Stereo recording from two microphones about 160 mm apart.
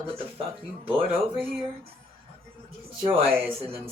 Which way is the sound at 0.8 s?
35° right (ahead or behind).